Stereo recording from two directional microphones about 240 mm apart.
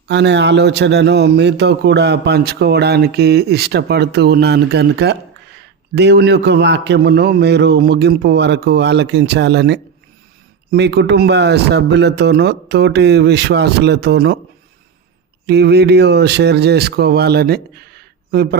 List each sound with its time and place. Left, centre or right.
0.1 s a man's voice: right
15.4 s a man's voice: right